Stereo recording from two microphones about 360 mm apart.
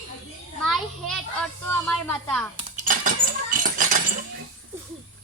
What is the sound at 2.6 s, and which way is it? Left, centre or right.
Cutlery, right.